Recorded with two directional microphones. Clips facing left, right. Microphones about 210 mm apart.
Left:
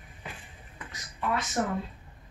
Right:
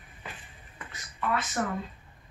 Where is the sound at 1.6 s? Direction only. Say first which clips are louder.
Left 3 dB; 25° left (ahead or behind).